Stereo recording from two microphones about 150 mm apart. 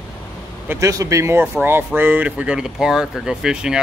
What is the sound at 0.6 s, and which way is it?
Speech, 20° right (ahead or behind).